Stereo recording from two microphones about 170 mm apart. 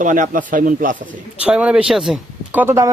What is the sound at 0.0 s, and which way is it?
Speech, 50° right (ahead or behind).